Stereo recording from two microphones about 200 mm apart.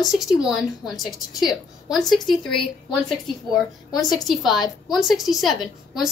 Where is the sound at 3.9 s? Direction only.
20° left (ahead or behind).